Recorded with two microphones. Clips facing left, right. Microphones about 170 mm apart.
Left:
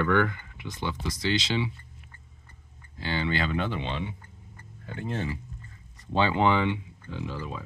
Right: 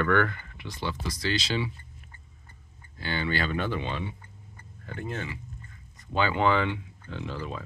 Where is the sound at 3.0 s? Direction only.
25° left (ahead or behind).